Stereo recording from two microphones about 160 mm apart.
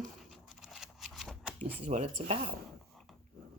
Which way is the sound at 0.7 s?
Centre (ahead or behind).